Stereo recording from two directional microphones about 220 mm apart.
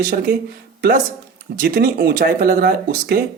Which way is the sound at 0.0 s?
40° right (ahead or behind).